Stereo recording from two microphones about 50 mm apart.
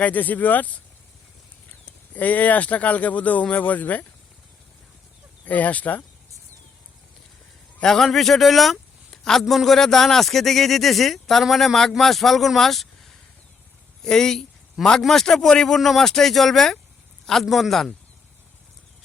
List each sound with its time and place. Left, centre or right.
0.0 s speech: left
2.1 s speech: left
5.5 s speech: left
7.9 s a man's voice: centre